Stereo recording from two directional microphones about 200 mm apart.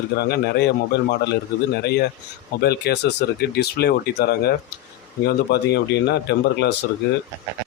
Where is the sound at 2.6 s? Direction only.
55° left (ahead or behind).